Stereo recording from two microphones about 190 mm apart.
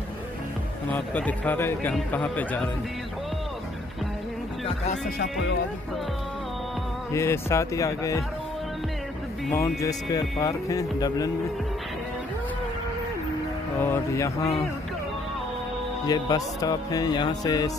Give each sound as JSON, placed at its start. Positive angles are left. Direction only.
{"t": 0.9, "sound": "speech", "side_deg": 10}
{"t": 7.1, "sound": "speech", "side_deg": 15}
{"t": 9.5, "sound": "speech", "side_deg": 15}
{"t": 13.7, "sound": "speech", "side_deg": 10}
{"t": 16.1, "sound": "speech", "side_deg": 20}